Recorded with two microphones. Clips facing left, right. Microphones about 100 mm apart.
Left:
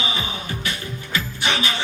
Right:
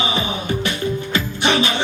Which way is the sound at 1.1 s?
25° right (ahead or behind).